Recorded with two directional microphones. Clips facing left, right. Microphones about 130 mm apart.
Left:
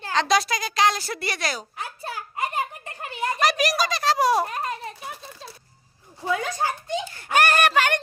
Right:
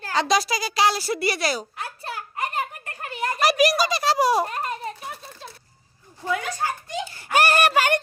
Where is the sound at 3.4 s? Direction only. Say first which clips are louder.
Right 4 dB; 5° right (ahead or behind).